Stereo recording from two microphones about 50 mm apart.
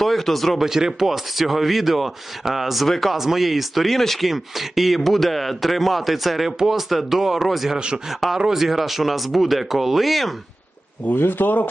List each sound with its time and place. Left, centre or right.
0.0 s speech: centre
0.6 s speech: centre
11.1 s speech: left